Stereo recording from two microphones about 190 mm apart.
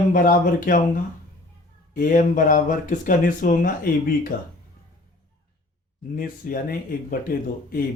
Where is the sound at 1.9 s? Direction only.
45° left (ahead or behind).